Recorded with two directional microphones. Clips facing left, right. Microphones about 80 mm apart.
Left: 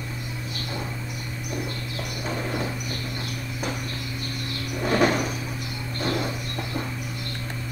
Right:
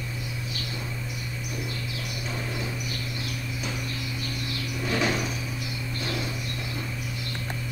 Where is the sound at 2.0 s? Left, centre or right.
Left.